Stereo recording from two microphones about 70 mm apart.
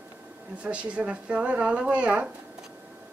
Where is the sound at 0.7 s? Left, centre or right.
Centre.